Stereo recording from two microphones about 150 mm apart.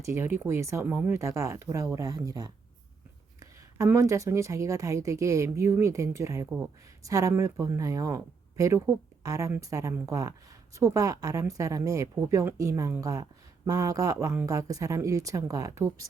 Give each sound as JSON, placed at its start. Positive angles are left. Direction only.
{"t": 0.0, "sound": "speech", "side_deg": -15}